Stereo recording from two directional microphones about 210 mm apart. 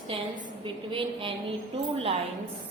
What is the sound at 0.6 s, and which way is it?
Speech, 25° right (ahead or behind).